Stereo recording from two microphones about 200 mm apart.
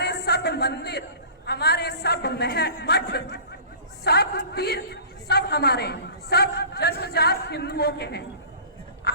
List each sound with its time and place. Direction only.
0.0 s a sound: 55° left (ahead or behind)
1.5 s a woman's voice: 55° left (ahead or behind)
9.1 s quack: 50° left (ahead or behind)